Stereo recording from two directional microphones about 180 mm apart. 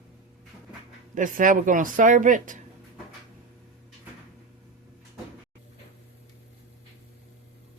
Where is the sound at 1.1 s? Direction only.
45° right (ahead or behind).